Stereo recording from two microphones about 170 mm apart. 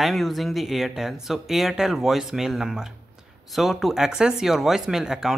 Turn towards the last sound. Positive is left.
turn(degrees=-5)  # may be behind; listen again after turning